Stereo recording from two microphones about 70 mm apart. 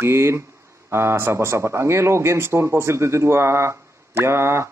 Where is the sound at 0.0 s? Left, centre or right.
Right.